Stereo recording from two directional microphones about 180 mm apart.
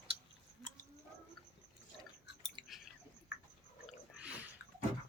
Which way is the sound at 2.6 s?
25° right (ahead or behind).